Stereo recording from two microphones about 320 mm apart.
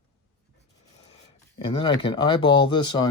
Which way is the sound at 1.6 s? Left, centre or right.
Centre.